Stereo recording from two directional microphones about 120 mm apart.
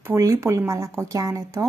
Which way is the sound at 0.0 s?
25° right (ahead or behind).